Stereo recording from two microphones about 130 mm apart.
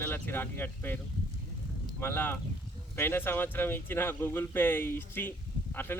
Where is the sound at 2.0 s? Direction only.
15° left (ahead or behind).